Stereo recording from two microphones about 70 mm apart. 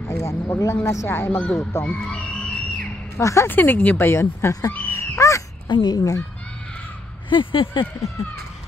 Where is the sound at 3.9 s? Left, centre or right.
Left.